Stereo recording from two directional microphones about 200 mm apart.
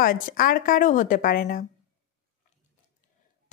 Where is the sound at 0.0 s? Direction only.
45° left (ahead or behind).